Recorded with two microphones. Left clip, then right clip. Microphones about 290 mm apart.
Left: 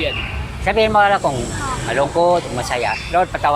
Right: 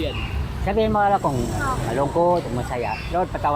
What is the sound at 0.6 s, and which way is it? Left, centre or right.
Speech, left.